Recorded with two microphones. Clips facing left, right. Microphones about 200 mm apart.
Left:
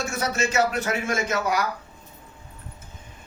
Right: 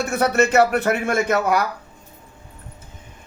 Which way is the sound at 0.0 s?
60° right (ahead or behind).